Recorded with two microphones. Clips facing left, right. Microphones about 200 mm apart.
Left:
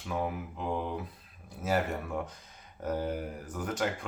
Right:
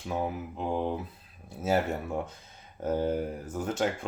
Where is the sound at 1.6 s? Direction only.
25° right (ahead or behind).